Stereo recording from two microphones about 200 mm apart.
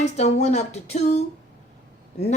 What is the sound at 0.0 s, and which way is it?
Speech, 35° left (ahead or behind).